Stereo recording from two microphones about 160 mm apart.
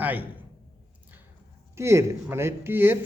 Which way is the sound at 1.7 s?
15° right (ahead or behind).